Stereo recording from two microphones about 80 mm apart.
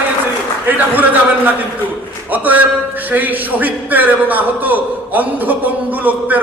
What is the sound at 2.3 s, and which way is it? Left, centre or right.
A man's voice, right.